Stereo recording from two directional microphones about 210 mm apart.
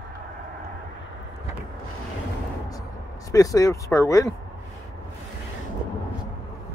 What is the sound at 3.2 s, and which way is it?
Speech, 15° left (ahead or behind).